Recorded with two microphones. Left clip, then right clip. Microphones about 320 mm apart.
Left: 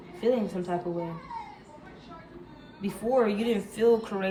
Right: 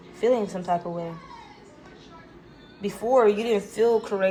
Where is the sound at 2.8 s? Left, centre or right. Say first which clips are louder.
Right 6 dB; right.